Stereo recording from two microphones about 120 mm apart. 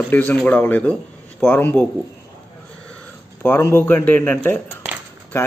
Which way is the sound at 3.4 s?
20° left (ahead or behind).